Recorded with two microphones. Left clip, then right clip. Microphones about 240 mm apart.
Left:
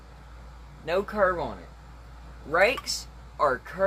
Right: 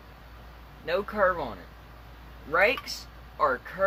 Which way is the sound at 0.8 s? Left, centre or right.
Centre.